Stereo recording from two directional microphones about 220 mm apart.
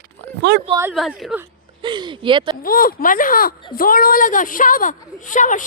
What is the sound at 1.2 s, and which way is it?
Speech, 5° right (ahead or behind).